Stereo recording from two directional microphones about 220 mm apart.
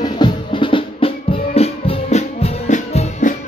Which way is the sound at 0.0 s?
20° left (ahead or behind).